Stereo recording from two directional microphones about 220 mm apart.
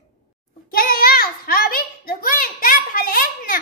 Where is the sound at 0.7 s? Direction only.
40° left (ahead or behind).